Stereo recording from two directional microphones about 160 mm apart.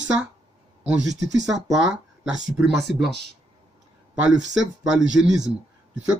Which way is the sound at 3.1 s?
90° right.